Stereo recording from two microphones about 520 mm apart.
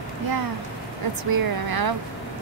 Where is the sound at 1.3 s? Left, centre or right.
Right.